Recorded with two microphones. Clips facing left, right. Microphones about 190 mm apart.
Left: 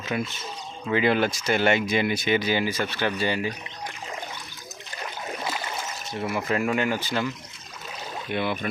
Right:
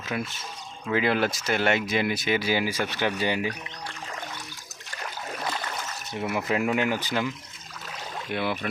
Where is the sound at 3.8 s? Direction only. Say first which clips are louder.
Left 2 dB; 15° left (ahead or behind).